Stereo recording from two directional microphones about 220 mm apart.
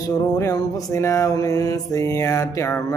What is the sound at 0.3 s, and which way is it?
Mantra, 15° left (ahead or behind).